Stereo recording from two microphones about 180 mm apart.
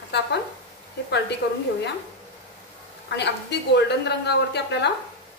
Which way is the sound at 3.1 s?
70° left (ahead or behind).